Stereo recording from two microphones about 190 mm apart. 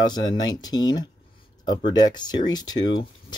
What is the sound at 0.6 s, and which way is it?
Speech, 20° left (ahead or behind).